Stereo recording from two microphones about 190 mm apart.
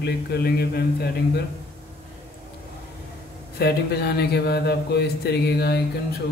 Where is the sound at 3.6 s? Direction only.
60° left (ahead or behind).